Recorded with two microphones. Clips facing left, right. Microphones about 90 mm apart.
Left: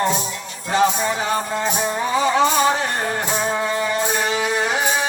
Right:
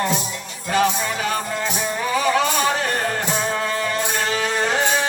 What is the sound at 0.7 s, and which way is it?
Music, 25° left (ahead or behind).